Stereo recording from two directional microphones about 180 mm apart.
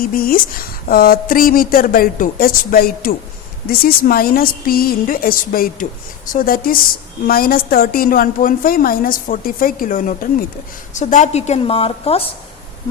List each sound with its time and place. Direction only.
0.0 s a woman's voice: 55° left (ahead or behind); by 12.2 s 35° left (ahead or behind)